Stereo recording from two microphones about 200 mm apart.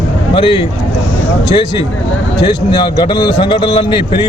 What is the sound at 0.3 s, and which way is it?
Speech, 25° left (ahead or behind).